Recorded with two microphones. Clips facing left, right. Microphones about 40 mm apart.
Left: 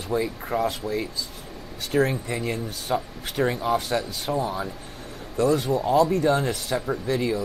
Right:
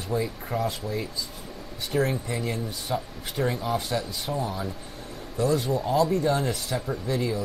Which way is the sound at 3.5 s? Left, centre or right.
Left.